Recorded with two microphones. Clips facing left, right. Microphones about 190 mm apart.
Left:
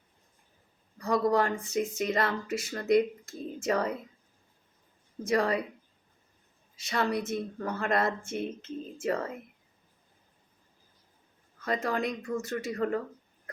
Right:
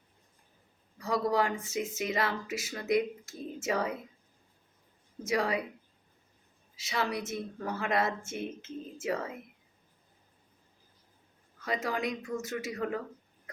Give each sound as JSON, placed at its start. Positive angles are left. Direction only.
{"t": 0.9, "sound": "speech", "side_deg": -5}
{"t": 5.2, "sound": "speech", "side_deg": -5}
{"t": 6.7, "sound": "speech", "side_deg": -5}
{"t": 11.6, "sound": "speech", "side_deg": -5}